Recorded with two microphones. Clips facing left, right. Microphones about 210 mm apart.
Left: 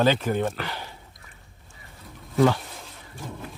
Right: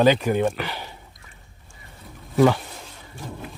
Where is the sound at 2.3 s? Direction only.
15° right (ahead or behind).